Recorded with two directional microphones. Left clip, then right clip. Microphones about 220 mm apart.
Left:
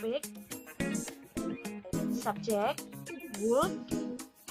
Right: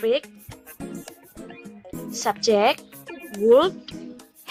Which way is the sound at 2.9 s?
Centre (ahead or behind).